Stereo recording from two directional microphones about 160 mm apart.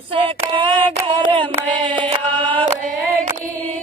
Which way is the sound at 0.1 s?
30° right (ahead or behind).